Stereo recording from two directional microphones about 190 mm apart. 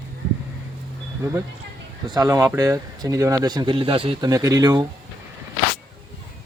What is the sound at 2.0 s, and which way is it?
Speech, 20° right (ahead or behind).